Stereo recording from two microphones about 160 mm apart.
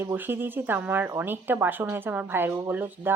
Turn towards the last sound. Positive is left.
turn(degrees=-10)  # may be behind; listen again after turning